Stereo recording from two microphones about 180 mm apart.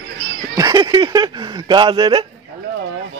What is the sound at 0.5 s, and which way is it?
Speech, 20° right (ahead or behind).